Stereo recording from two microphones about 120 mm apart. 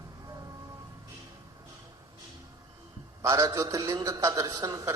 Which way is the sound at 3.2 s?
25° right (ahead or behind).